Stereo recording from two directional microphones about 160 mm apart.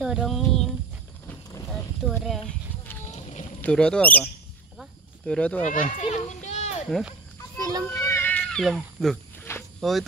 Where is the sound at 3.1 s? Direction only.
45° left (ahead or behind).